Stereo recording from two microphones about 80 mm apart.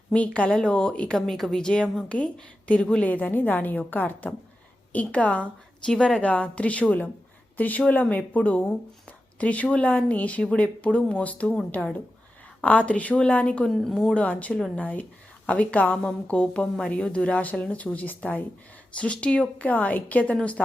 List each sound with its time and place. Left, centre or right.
0.1 s a woman's voice: centre
12.6 s a woman's voice: centre
13.7 s a woman's voice: centre
14.1 s a woman's voice: centre